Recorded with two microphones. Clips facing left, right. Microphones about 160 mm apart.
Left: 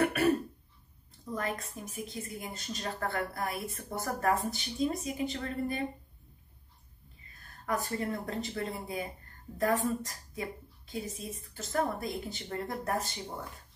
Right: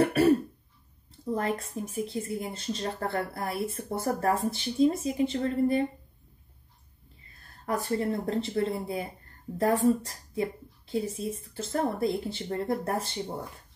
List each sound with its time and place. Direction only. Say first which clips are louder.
0.0 s throat clearing: right 5 dB; 30° right (ahead or behind)
1.3 s speech: right 6 dB; 30° right (ahead or behind)
7.6 s speech: right 5 dB; 30° right (ahead or behind)